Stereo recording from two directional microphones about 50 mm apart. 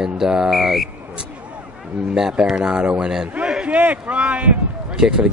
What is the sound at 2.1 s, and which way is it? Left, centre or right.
Speech, centre.